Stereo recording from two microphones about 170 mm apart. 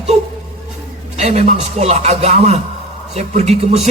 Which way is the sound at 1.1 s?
40° right (ahead or behind).